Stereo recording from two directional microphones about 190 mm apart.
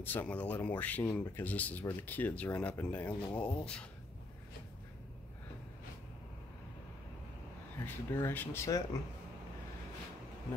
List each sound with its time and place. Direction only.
0.0 s speech: 10° left (ahead or behind)
7.8 s speech: 10° left (ahead or behind)